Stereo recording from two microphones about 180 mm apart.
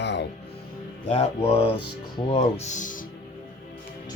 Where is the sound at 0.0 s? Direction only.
75° left (ahead or behind).